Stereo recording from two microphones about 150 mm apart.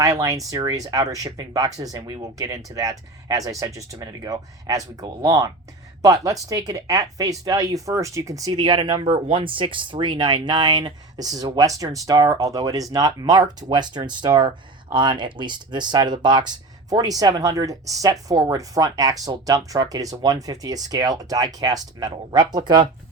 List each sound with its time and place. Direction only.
0.0 s speech: 20° right (ahead or behind)